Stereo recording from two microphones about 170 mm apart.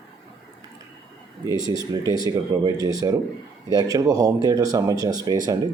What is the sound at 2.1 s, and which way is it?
Speech, 20° right (ahead or behind).